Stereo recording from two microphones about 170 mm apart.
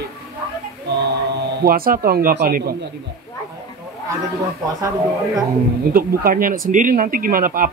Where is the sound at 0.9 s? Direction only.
80° right; by 2.7 s 60° right (ahead or behind).